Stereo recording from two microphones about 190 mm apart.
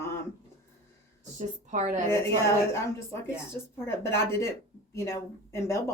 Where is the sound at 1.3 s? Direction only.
40° right (ahead or behind).